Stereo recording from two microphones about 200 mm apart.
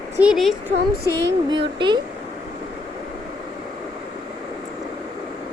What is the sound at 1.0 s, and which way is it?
Speech, 55° right (ahead or behind).